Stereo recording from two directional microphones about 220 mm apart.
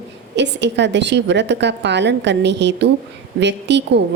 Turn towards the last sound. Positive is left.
turn(degrees=-50)  # may be behind; listen again after turning